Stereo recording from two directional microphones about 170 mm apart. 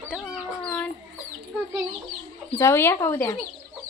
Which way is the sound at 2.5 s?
15° left (ahead or behind).